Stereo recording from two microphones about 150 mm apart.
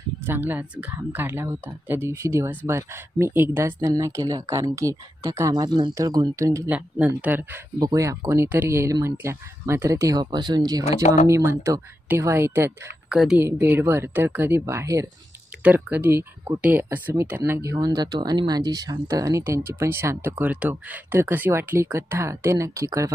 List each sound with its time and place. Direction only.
0.2 s speech: 15° right (ahead or behind)
11.0 s speech: 50° left (ahead or behind)
11.2 s speech: 20° right (ahead or behind)
13.1 s a woman's voice: 5° right (ahead or behind)
13.4 s speech: 15° right (ahead or behind)